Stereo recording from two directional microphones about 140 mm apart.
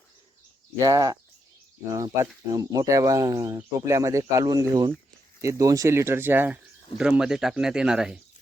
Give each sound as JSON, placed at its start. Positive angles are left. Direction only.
{"t": 0.8, "sound": "speech", "side_deg": -25}
{"t": 2.5, "sound": "speech", "side_deg": -25}